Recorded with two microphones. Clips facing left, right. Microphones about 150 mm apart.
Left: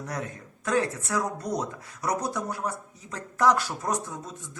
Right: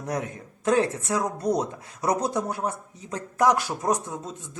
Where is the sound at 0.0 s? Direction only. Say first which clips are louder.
Right 4 dB; 20° right (ahead or behind).